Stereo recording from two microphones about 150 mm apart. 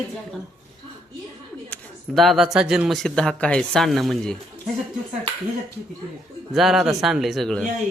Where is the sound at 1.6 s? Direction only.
5° left (ahead or behind).